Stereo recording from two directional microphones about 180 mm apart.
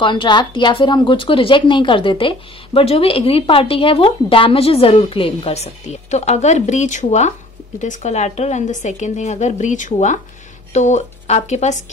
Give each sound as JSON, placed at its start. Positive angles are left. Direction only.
{"t": 0.0, "sound": "speech", "side_deg": 25}